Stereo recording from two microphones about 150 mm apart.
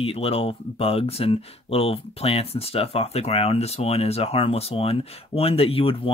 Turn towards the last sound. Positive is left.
turn(degrees=40)  # may be behind; listen again after turning